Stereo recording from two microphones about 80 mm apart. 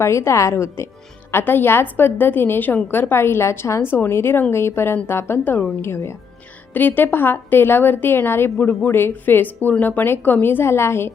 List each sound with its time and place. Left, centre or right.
0.0 s a woman's voice: left
5.9 s a woman's voice: left
6.7 s a woman's voice: left